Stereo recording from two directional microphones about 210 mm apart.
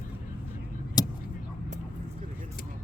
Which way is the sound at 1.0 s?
20° left (ahead or behind).